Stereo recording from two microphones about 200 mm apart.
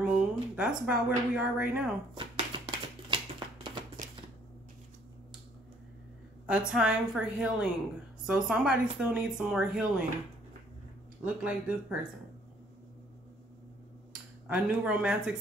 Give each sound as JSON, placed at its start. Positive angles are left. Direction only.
{"t": 0.1, "sound": "speech", "side_deg": -5}
{"t": 2.1, "sound": "a sound", "side_deg": -25}
{"t": 6.4, "sound": "speech", "side_deg": -5}
{"t": 11.2, "sound": "speech", "side_deg": -5}
{"t": 14.5, "sound": "speech", "side_deg": -5}